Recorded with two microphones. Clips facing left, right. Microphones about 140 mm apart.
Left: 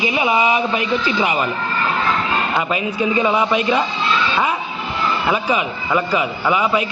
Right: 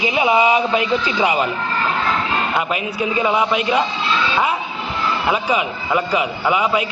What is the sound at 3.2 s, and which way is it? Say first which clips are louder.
Speech: even; 10° right (ahead or behind).